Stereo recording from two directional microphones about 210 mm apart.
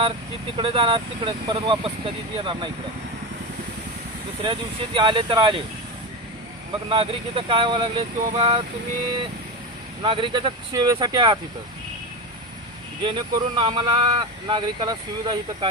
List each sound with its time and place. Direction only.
0.5 s speech: 25° right (ahead or behind)
4.9 s speech: 20° right (ahead or behind)
6.9 s speech: 25° right (ahead or behind)
10.0 s speech: 25° right (ahead or behind)
13.0 s speech: 20° right (ahead or behind)